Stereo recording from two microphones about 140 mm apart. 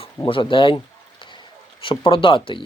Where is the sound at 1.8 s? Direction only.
40° left (ahead or behind).